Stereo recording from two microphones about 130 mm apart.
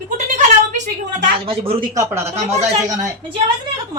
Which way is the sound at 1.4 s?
45° right (ahead or behind).